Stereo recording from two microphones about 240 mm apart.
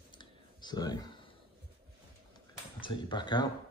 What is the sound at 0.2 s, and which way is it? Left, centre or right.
Clicking, centre.